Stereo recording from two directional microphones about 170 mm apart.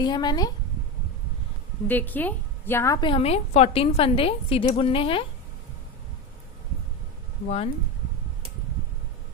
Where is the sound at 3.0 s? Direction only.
30° left (ahead or behind).